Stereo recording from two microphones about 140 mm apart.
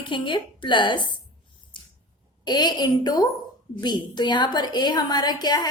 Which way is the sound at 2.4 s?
30° left (ahead or behind).